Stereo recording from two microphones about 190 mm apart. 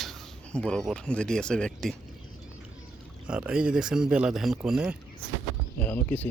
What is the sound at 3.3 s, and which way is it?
A man's voice, 5° right (ahead or behind).